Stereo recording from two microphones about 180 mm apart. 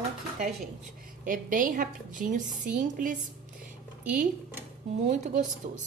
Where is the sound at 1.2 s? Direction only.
45° right (ahead or behind).